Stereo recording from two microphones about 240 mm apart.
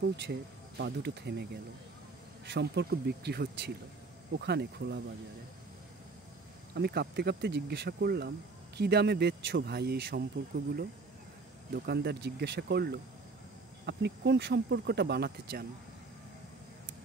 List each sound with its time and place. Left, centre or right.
0.0 s speech: right
6.7 s speech: right